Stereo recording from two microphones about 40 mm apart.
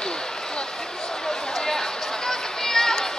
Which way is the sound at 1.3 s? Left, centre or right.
Centre.